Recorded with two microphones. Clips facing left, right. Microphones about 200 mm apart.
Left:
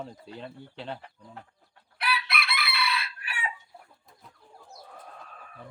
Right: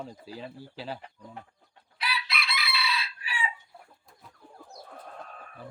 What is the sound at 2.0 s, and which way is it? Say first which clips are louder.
Chicken: left 3 dB; 60° left (ahead or behind).